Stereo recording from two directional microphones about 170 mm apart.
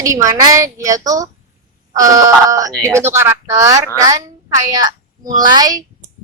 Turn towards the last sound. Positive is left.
turn(degrees=-25)  # may be behind; listen again after turning